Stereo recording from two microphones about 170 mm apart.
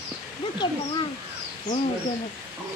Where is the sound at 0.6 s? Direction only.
25° left (ahead or behind).